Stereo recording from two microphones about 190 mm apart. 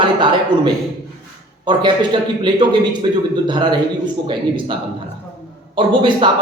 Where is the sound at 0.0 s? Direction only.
25° right (ahead or behind).